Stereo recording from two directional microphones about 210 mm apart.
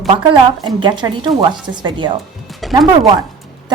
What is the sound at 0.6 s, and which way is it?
A woman's voice, 20° right (ahead or behind).